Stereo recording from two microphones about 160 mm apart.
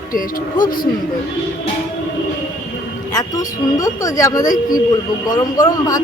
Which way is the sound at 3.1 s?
25° left (ahead or behind).